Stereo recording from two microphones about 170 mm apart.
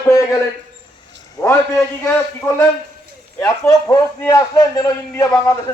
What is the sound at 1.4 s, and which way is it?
A man's voice, 20° left (ahead or behind).